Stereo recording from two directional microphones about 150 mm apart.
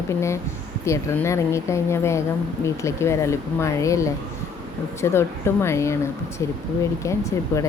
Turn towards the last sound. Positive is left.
turn(degrees=20)  # may be behind; listen again after turning